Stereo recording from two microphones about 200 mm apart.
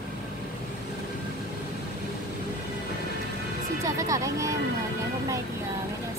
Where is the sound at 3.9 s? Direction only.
15° right (ahead or behind).